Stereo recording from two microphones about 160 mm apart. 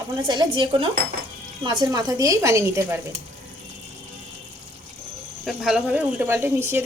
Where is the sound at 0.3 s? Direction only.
30° right (ahead or behind).